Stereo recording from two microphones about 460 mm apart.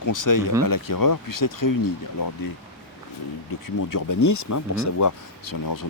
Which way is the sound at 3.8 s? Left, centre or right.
Left.